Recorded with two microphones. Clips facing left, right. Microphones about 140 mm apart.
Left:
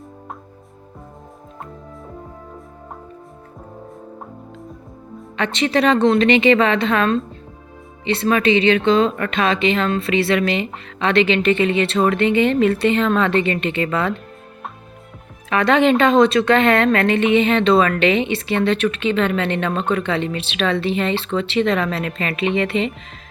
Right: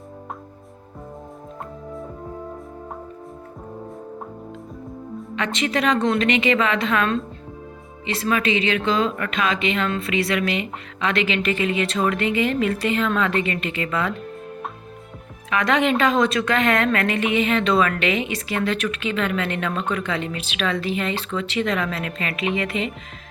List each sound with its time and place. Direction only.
5.4 s speech: 30° left (ahead or behind)
15.4 s speech: 30° left (ahead or behind)